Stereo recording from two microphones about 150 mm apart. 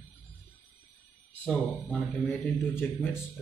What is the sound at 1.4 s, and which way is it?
Speech, 10° left (ahead or behind).